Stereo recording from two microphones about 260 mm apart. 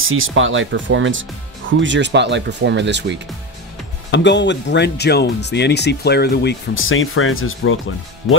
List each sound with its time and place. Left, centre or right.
0.0 s speech: right
4.1 s speech: left